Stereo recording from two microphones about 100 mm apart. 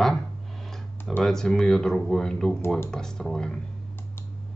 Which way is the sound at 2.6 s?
25° left (ahead or behind).